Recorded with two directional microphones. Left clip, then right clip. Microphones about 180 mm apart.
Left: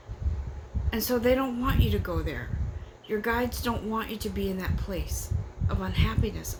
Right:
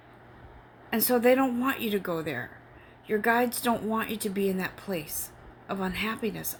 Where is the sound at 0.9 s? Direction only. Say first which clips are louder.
Right 2 dB; 35° right (ahead or behind).